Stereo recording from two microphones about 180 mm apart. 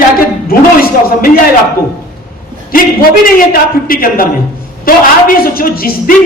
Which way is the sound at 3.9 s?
50° left (ahead or behind).